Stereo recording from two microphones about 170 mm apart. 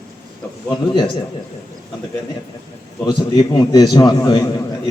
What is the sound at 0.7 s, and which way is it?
Speech, 25° left (ahead or behind).